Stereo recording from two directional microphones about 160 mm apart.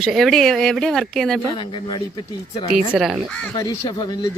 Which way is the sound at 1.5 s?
30° left (ahead or behind).